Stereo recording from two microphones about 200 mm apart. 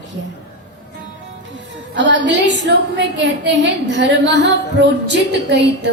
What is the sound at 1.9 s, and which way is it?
A woman's voice, 65° right (ahead or behind).